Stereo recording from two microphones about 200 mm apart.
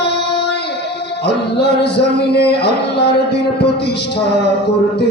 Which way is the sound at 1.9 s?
55° left (ahead or behind).